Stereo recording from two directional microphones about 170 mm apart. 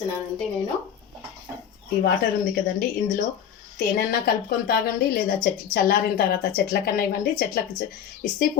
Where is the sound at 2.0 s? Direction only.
60° left (ahead or behind).